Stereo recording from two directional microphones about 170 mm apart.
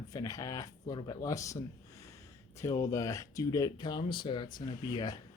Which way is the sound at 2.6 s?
20° left (ahead or behind).